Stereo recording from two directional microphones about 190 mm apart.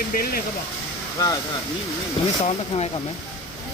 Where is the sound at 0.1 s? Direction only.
50° left (ahead or behind).